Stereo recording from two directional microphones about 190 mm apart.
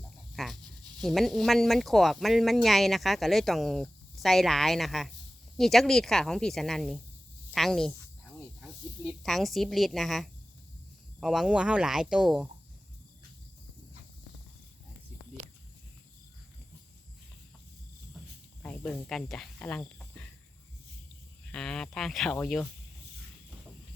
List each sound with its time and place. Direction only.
0.3 s speech: centre (ahead or behind)
9.0 s speech: centre (ahead or behind)
15.4 s a sound: 35° right (ahead or behind)
18.6 s snake: 5° left (ahead or behind)
21.5 s speech: 5° left (ahead or behind)